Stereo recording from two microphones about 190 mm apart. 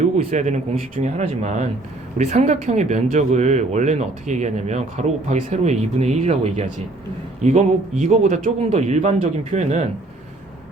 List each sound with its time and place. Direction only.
0.0 s a man's voice: 40° right (ahead or behind)